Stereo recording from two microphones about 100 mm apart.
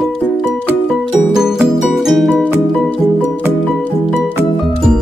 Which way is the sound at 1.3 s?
5° right (ahead or behind).